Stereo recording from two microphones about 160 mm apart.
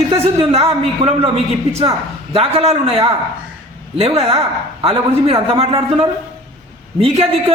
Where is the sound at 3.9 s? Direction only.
40° right (ahead or behind).